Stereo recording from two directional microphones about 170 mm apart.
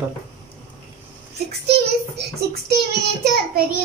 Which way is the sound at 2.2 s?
70° right (ahead or behind).